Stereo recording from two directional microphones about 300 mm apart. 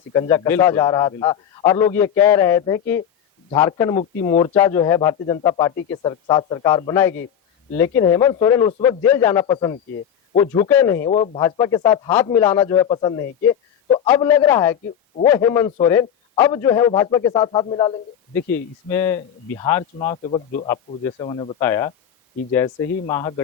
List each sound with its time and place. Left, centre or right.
0.1 s a man's voice: centre
20.2 s speech: left